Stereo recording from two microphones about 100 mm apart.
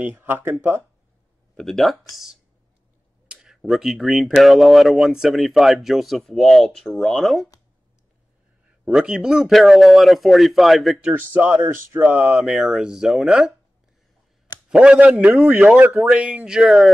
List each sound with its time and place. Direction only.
0.0 s speech: 20° right (ahead or behind)
1.6 s speech: centre (ahead or behind)
3.3 s speech: 5° right (ahead or behind)
8.8 s speech: 10° right (ahead or behind)
11.0 s speech: 15° right (ahead or behind)
12.4 s speech: 5° right (ahead or behind)
14.7 s speech: 10° right (ahead or behind)
15.9 s speech: centre (ahead or behind)